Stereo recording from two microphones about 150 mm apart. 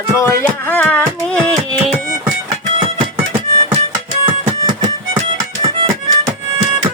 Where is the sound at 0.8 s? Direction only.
10° left (ahead or behind).